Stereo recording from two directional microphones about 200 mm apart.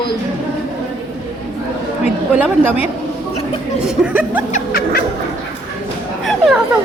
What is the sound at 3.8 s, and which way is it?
Speech, 5° right (ahead or behind).